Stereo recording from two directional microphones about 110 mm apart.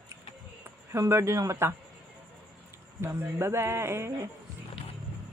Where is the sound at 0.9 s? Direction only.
25° right (ahead or behind).